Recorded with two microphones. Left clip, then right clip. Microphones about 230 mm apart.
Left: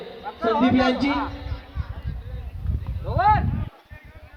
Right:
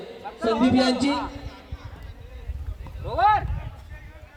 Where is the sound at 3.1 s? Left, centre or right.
Right.